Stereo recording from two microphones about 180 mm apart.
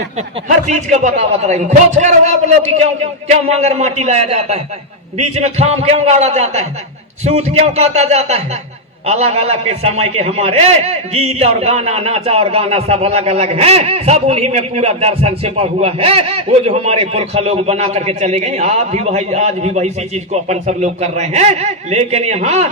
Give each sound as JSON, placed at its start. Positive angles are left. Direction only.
{"t": 0.2, "sound": "a man's voice", "side_deg": -40}